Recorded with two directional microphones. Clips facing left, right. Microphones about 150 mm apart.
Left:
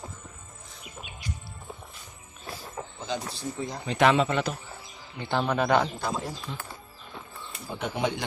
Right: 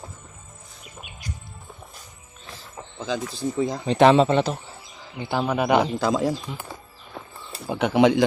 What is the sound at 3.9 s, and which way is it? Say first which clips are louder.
Speech: right 6 dB; 30° right (ahead or behind).